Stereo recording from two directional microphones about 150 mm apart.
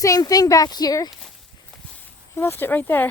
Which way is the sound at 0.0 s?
25° left (ahead or behind).